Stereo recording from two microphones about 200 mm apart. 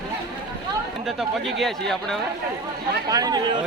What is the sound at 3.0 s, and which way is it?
Speech, 20° right (ahead or behind).